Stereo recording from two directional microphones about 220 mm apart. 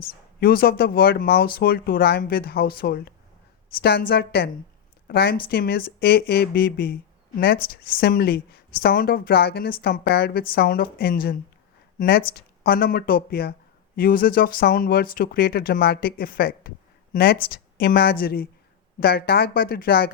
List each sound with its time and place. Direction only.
0.3 s a woman's voice: 45° left (ahead or behind)